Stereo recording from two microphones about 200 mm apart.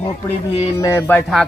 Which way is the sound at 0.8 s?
15° left (ahead or behind).